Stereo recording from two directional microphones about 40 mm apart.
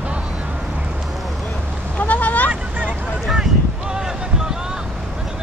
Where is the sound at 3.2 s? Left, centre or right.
Centre.